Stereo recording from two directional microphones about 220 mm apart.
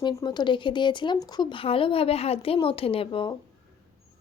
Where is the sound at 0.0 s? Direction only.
20° left (ahead or behind).